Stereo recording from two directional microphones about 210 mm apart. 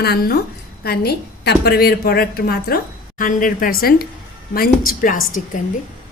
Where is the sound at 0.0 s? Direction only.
50° left (ahead or behind).